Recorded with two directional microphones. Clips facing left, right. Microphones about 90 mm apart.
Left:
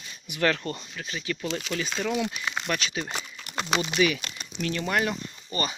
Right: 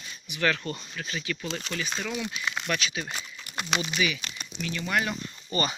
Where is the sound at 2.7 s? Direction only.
35° left (ahead or behind).